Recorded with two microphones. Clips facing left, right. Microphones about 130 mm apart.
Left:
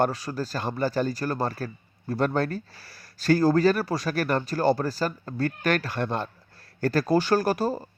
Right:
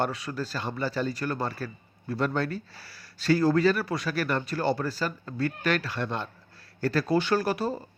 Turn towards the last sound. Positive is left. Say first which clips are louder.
# left 3 dB
turn(degrees=40)  # may be behind; listen again after turning